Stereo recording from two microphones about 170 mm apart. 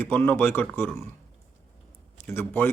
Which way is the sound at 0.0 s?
10° left (ahead or behind).